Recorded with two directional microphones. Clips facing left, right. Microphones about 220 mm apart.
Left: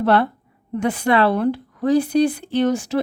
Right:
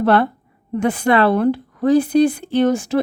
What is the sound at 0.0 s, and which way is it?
A woman's voice, 50° right (ahead or behind).